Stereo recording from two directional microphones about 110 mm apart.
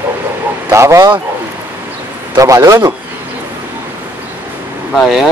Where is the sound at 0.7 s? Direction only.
25° right (ahead or behind).